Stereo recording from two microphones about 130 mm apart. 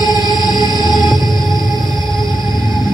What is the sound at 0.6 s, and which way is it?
Music, 30° left (ahead or behind).